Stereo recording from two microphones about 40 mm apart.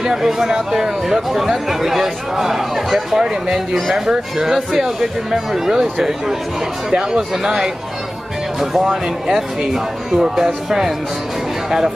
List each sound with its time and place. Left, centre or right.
0.0 s speech: centre
8.8 s speech: centre